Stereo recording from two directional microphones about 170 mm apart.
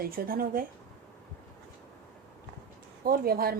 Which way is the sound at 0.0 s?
60° right (ahead or behind).